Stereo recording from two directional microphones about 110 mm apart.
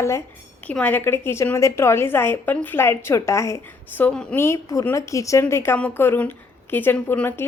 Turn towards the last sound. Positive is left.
turn(degrees=20)  # may be behind; listen again after turning